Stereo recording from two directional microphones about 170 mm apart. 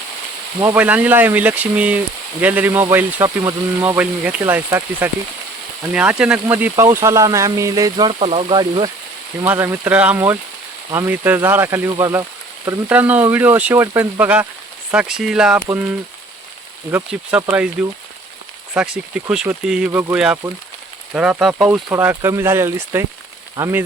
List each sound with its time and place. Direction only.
0.6 s speech: 10° right (ahead or behind)
9.4 s speech: 15° right (ahead or behind)